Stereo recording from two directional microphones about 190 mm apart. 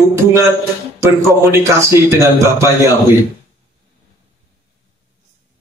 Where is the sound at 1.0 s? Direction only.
15° right (ahead or behind).